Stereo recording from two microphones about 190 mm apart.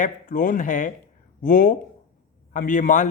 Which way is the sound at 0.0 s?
45° left (ahead or behind).